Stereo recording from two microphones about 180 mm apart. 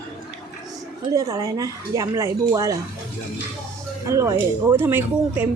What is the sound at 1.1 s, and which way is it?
A woman's voice, 20° right (ahead or behind).